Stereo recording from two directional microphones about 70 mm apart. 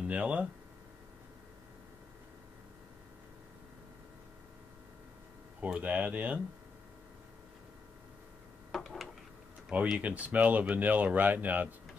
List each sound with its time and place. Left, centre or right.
0.1 s speech: centre
5.6 s speech: centre
8.7 s a sound: centre
9.9 s speech: right